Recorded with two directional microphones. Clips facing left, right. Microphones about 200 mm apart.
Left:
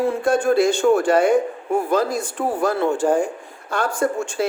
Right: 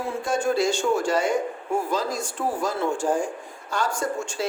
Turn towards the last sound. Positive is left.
turn(degrees=55)  # may be behind; listen again after turning